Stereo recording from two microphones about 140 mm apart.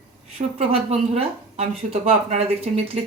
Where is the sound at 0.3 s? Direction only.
50° right (ahead or behind).